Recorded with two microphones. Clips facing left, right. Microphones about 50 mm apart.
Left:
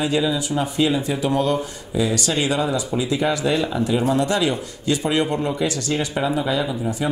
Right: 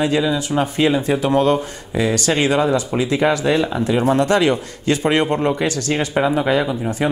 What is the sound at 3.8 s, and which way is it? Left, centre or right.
Speech, right.